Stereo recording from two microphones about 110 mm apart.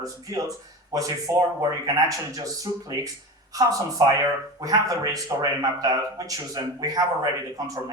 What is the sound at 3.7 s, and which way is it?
Speech, 35° right (ahead or behind).